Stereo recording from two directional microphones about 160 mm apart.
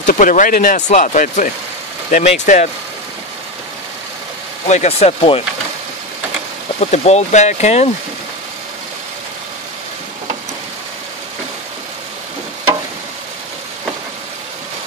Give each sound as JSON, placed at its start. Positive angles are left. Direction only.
{"t": 0.0, "sound": "speech", "side_deg": 55}
{"t": 4.6, "sound": "speech", "side_deg": 45}
{"t": 6.8, "sound": "speech", "side_deg": 45}